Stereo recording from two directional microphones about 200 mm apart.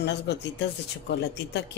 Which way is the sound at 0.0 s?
60° left (ahead or behind).